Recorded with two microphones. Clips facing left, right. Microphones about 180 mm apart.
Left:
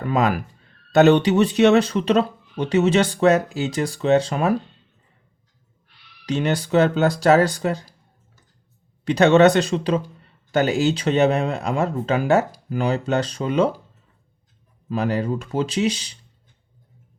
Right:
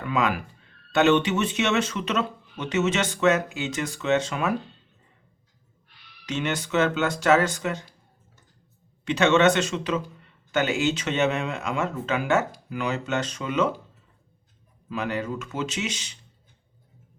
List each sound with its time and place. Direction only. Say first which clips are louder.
0.0 s speech: left 5 dB; 35° left (ahead or behind)
6.2 s speech: left 6 dB; 35° left (ahead or behind)
9.0 s speech: left 5 dB; 35° left (ahead or behind)
14.8 s speech: left 6 dB; 35° left (ahead or behind)